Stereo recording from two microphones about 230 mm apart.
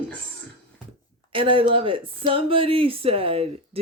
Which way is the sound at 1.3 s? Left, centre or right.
Right.